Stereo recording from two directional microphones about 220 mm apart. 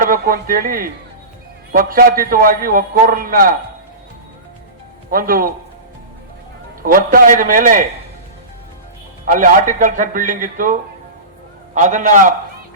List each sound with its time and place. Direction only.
0.0 s a man's voice: 40° right (ahead or behind)
5.1 s a man's voice: 40° right (ahead or behind)
6.8 s a man's voice: 40° right (ahead or behind)
9.2 s a man's voice: 40° right (ahead or behind)